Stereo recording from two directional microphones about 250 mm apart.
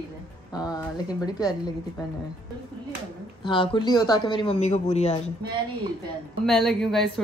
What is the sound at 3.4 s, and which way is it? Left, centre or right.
A man's voice, centre.